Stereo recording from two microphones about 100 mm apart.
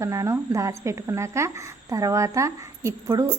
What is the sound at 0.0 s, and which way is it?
A woman's voice, 30° right (ahead or behind).